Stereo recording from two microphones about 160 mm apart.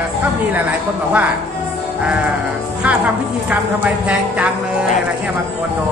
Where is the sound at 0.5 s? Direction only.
10° right (ahead or behind).